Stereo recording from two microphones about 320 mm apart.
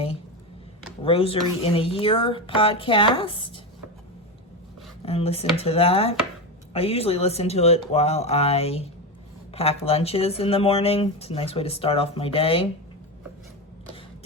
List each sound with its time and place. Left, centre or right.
1.0 s speech: centre
5.0 s speech: centre